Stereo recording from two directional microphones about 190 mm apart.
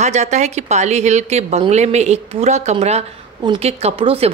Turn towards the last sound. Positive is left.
turn(degrees=-30)  # may be behind; listen again after turning